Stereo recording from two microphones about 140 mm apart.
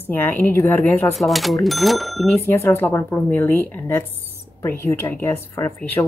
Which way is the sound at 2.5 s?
20° left (ahead or behind).